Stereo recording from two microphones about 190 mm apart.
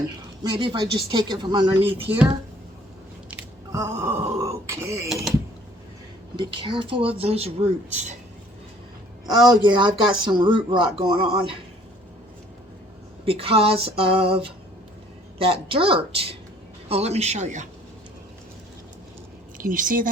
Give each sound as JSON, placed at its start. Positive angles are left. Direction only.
{"t": 0.4, "sound": "speech", "side_deg": -25}
{"t": 3.2, "sound": "groan", "side_deg": -15}
{"t": 6.3, "sound": "speech", "side_deg": -25}
{"t": 9.2, "sound": "speech", "side_deg": -20}
{"t": 13.2, "sound": "a man's voice", "side_deg": -30}
{"t": 19.5, "sound": "speech", "side_deg": -45}